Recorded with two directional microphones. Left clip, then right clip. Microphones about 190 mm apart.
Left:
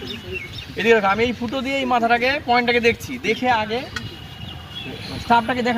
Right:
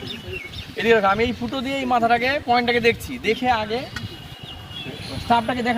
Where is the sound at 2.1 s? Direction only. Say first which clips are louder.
Left 1 dB; 20° right (ahead or behind).